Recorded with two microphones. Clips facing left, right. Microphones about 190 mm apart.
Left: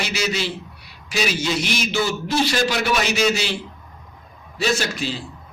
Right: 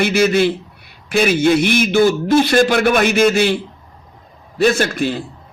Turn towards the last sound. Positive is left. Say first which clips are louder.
# right 6 dB
turn(degrees=-55)  # may be behind; listen again after turning